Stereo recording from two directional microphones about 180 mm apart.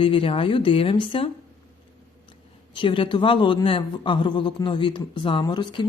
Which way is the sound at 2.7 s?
30° left (ahead or behind).